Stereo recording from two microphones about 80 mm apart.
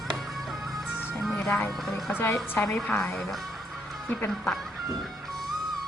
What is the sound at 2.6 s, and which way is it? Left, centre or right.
Speech, centre.